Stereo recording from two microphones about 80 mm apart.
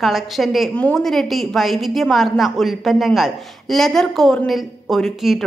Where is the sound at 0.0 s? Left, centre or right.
Centre.